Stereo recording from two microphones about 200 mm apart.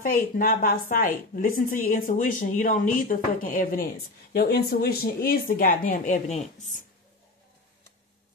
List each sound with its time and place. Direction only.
0.0 s a woman's voice: 45° left (ahead or behind)